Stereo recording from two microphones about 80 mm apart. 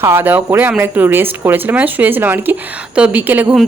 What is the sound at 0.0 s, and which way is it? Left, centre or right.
Speech, right.